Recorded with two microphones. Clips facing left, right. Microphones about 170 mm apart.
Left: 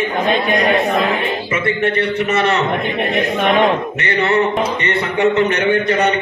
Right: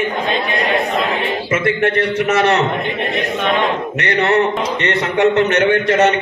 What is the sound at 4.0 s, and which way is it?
A man's voice, 65° right (ahead or behind).